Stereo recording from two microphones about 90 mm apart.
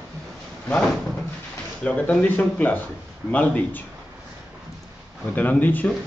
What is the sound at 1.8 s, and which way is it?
Speech, 15° left (ahead or behind).